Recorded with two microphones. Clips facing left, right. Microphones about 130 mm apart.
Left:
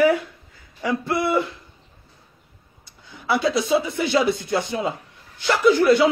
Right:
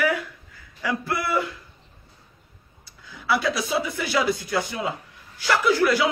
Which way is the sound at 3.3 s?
25° left (ahead or behind).